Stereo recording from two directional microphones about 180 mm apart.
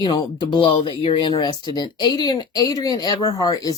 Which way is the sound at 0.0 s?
25° left (ahead or behind).